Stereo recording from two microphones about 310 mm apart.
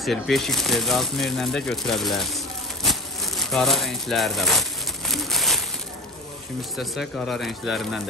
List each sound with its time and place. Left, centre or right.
0.0 s speech: centre
6.8 s speech: centre